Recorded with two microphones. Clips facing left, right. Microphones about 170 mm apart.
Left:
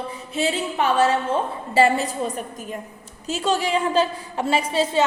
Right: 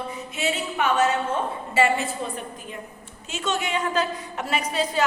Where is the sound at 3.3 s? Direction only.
35° left (ahead or behind).